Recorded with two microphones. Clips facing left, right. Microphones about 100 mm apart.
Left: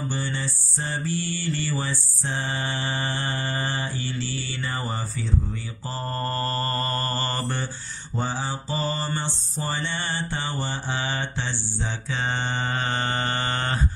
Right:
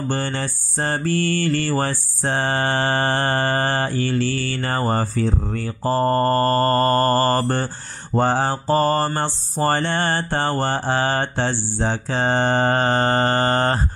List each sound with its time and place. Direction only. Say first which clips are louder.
0.1 s mantra: right 6 dB; 60° right (ahead or behind); by 13.8 s 40° right (ahead or behind)